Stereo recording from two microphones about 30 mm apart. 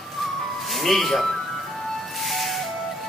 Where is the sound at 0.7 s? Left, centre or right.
Centre.